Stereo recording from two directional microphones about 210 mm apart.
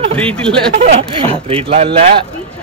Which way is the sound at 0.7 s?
40° right (ahead or behind).